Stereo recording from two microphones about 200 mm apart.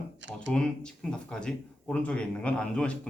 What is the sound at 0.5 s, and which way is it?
Speech, 5° left (ahead or behind).